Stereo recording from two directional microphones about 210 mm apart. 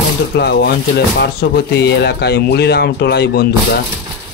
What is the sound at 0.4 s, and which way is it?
Speech, 50° left (ahead or behind).